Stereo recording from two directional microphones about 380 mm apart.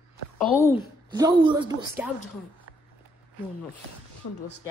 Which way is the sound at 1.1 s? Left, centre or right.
Centre.